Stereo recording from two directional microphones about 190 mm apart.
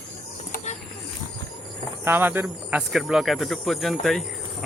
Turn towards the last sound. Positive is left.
turn(degrees=0)  # may be behind; listen again after turning